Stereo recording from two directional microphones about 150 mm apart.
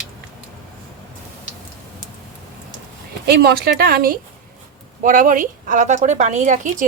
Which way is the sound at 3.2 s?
90° right.